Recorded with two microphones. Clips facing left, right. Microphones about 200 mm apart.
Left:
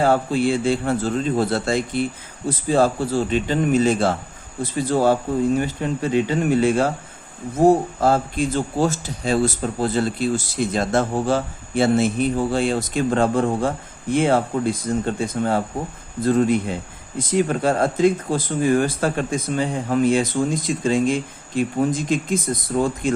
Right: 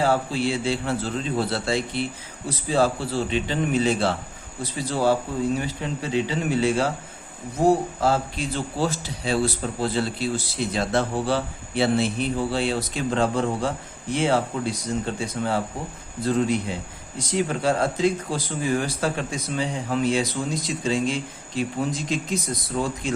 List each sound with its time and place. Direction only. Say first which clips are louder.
0.0 s a man's voice: left 4 dB; 50° left (ahead or behind)